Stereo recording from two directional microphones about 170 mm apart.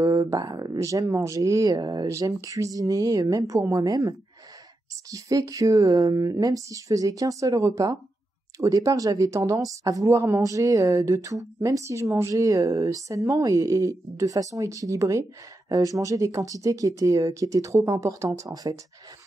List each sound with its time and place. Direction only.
0.0 s speech: 20° right (ahead or behind)
5.1 s speech: 20° right (ahead or behind)